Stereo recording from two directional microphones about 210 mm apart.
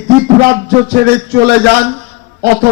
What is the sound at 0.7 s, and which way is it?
A man's voice, 50° right (ahead or behind).